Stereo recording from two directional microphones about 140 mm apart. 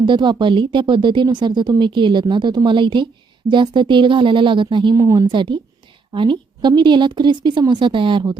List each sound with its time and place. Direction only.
0.0 s a woman's voice: 35° right (ahead or behind)